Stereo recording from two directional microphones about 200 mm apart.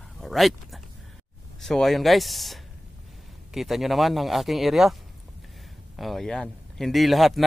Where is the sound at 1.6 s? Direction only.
Centre (ahead or behind).